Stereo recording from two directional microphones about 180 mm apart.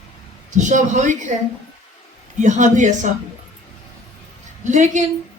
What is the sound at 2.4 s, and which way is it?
Speech, 45° right (ahead or behind).